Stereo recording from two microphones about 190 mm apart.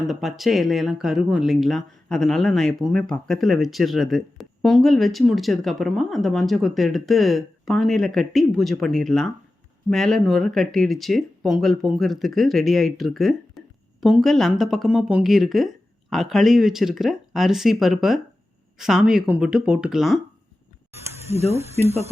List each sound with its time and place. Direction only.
0.1 s speech: centre (ahead or behind)
21.5 s speech: 35° right (ahead or behind)